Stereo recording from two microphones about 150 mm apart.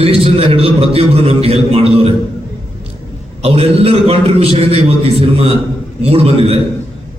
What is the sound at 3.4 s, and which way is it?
A man's voice, 40° right (ahead or behind).